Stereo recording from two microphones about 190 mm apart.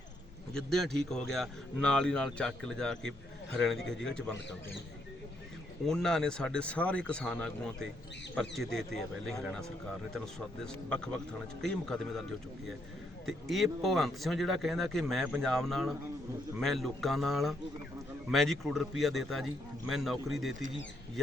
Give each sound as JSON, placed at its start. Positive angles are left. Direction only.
{"t": 0.5, "sound": "speech", "side_deg": 0}
{"t": 5.8, "sound": "speech", "side_deg": 0}
{"t": 10.8, "sound": "speech", "side_deg": 5}
{"t": 13.2, "sound": "speech", "side_deg": 0}